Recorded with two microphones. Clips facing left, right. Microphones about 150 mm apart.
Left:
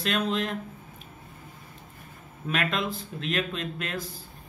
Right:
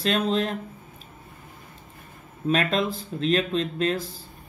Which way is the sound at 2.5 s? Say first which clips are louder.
Right 5 dB; 35° right (ahead or behind).